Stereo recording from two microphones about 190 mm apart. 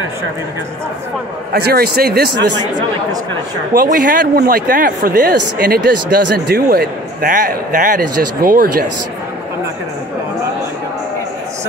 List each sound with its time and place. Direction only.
1.5 s a man's voice: 55° right (ahead or behind)
2.5 s speech: 20° right (ahead or behind)
3.7 s speech: 45° right (ahead or behind)